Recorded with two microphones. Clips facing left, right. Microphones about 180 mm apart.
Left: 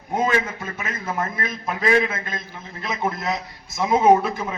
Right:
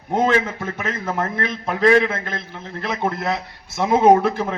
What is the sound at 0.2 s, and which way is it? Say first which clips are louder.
Speech: right 4 dB; 65° right (ahead or behind).